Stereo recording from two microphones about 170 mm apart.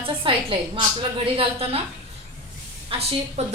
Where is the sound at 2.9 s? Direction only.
35° right (ahead or behind).